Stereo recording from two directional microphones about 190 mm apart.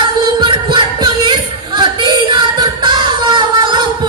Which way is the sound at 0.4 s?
25° right (ahead or behind).